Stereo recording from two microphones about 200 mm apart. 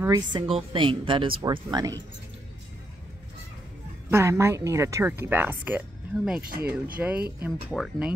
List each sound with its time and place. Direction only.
0.3 s speech: 25° right (ahead or behind)
4.1 s speech: 15° right (ahead or behind)